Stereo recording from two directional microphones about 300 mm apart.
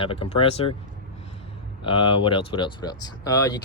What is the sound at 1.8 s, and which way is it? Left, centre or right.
Speech, centre.